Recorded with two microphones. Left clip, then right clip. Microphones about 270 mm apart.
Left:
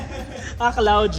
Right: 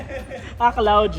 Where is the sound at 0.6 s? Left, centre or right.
Right.